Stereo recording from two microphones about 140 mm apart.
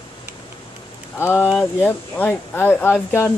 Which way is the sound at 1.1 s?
15° left (ahead or behind).